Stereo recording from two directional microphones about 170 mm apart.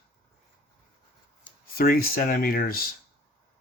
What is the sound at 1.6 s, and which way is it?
Speech, 60° left (ahead or behind).